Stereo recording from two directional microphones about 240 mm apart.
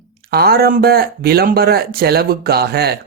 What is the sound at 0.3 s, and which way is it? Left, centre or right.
Speech, right.